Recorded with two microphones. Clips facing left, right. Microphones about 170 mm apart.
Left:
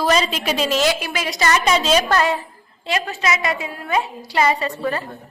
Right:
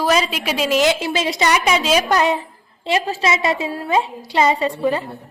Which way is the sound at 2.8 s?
30° right (ahead or behind).